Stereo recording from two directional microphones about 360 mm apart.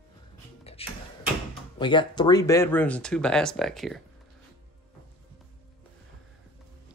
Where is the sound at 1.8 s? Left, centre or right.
Centre.